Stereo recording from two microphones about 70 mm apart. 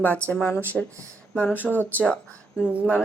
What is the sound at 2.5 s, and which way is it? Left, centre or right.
Speech, centre.